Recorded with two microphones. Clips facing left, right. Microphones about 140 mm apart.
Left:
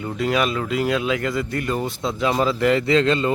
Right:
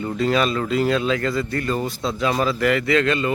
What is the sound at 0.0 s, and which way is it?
Speech, 5° left (ahead or behind).